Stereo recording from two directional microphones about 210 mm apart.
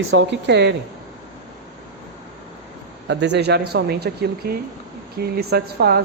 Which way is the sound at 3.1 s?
55° right (ahead or behind).